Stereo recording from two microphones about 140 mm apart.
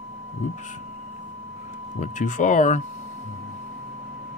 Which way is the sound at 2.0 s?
65° left (ahead or behind).